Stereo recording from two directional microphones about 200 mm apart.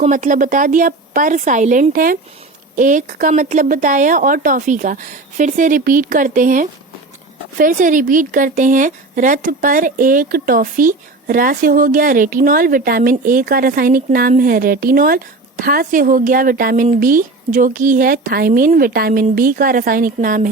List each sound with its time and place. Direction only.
0.0 s speech: 40° right (ahead or behind)